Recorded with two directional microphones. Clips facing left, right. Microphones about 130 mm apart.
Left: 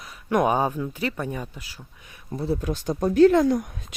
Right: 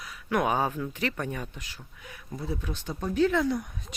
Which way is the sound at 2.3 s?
30° left (ahead or behind).